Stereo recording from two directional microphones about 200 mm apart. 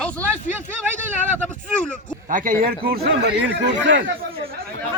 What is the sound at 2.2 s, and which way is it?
Speech, 40° right (ahead or behind).